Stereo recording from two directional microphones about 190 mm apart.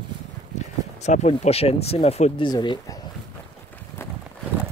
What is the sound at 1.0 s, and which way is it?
Speech, 35° left (ahead or behind).